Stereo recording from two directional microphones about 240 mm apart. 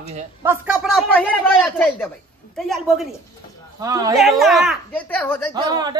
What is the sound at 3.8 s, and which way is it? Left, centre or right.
Speech, centre.